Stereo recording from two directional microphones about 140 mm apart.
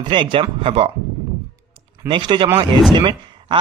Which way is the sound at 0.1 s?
35° right (ahead or behind).